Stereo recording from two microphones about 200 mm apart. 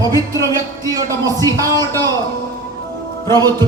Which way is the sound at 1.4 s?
15° left (ahead or behind).